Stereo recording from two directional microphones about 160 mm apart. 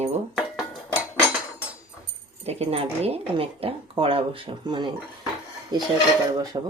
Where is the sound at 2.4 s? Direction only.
40° right (ahead or behind).